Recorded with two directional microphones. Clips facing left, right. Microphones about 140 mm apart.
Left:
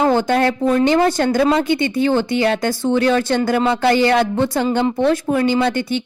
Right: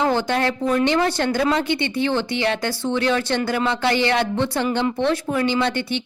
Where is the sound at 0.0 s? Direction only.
50° left (ahead or behind).